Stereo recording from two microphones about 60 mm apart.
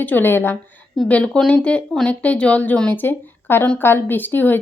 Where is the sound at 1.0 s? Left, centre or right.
Centre.